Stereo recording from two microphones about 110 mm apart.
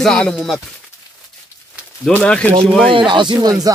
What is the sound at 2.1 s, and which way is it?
Speech, 10° left (ahead or behind).